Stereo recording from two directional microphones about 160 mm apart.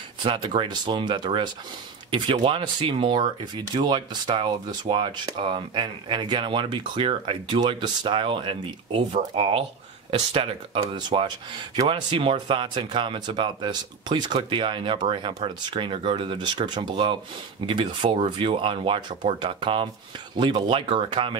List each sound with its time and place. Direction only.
0.2 s speech: 30° right (ahead or behind)